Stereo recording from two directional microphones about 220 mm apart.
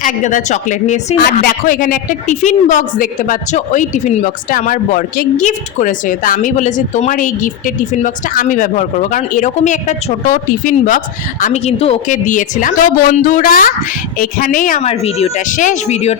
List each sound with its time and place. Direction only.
0.0 s speech: 35° left (ahead or behind)